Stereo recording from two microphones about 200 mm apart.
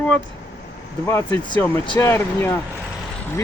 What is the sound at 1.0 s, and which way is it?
Speech, 15° left (ahead or behind).